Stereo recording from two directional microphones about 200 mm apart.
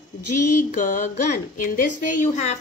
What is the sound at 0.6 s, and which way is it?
A woman's voice, 40° left (ahead or behind).